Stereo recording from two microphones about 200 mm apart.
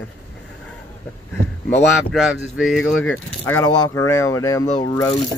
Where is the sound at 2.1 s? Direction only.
Centre (ahead or behind).